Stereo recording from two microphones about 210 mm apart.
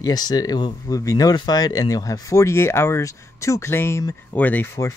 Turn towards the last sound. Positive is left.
turn(degrees=10)  # may be behind; listen again after turning